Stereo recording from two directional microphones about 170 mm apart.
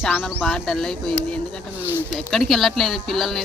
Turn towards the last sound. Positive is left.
turn(degrees=0)  # may be behind; listen again after turning